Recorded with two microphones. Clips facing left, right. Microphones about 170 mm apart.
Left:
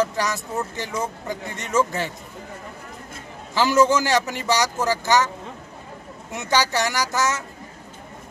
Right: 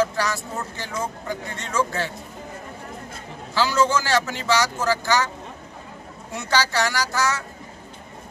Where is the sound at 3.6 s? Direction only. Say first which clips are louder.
Left 3 dB; 20° left (ahead or behind).